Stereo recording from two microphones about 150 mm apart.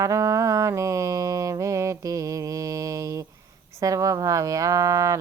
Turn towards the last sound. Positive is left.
turn(degrees=-20)  # may be behind; listen again after turning